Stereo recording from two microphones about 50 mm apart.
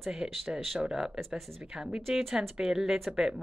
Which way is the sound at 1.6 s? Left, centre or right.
Centre.